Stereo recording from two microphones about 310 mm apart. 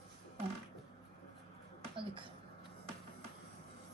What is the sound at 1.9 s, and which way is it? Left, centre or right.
Speech, centre.